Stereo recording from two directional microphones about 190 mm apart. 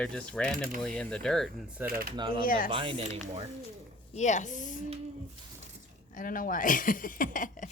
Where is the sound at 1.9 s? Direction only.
50° right (ahead or behind).